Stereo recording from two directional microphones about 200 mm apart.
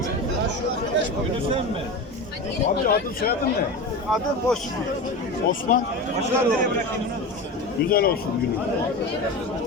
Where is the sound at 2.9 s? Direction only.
50° left (ahead or behind).